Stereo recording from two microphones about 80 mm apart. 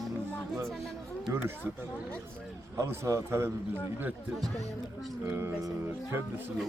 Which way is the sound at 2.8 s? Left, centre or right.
Right.